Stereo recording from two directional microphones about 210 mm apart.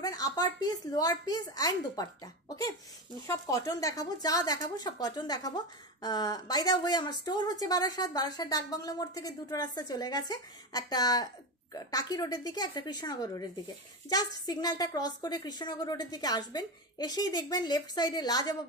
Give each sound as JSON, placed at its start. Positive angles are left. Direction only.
{"t": 0.0, "sound": "a woman's voice", "side_deg": 20}
{"t": 3.3, "sound": "a woman's voice", "side_deg": 15}